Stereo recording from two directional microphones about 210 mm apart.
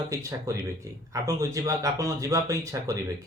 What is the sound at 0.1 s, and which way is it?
Speech, 15° right (ahead or behind).